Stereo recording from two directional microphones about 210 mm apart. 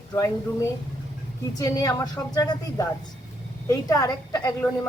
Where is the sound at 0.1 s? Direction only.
15° left (ahead or behind).